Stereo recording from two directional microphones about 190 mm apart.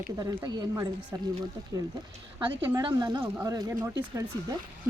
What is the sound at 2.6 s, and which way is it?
Speech, 15° right (ahead or behind).